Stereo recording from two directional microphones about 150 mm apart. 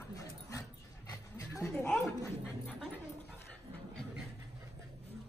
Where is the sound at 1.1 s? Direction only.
20° left (ahead or behind).